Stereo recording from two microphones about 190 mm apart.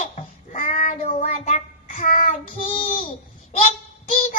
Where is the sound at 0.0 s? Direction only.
40° left (ahead or behind).